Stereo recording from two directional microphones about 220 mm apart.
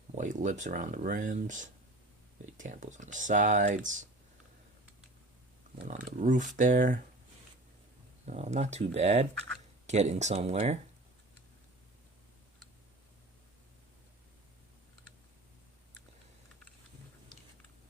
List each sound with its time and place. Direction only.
0.2 s speech: 35° right (ahead or behind)
5.7 s speech: 30° right (ahead or behind)
8.3 s speech: 30° right (ahead or behind)